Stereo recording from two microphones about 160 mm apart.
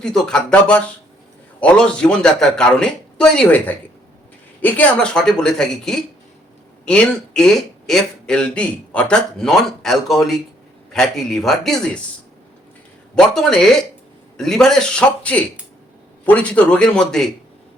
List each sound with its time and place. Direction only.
0.0 s speech: 5° left (ahead or behind)
13.1 s a man's voice: 5° left (ahead or behind)